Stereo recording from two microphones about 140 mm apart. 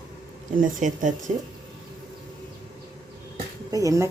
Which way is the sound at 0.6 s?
65° right (ahead or behind).